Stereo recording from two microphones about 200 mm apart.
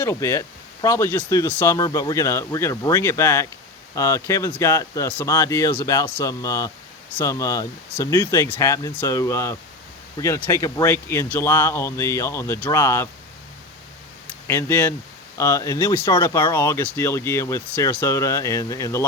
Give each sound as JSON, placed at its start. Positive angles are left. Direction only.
{"t": 0.0, "sound": "speech", "side_deg": 15}
{"t": 14.4, "sound": "speech", "side_deg": 10}